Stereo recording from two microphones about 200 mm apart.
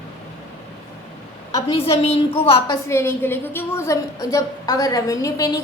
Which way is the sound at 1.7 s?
30° left (ahead or behind).